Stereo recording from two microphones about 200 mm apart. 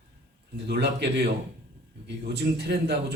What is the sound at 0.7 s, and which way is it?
A man's voice, 55° right (ahead or behind).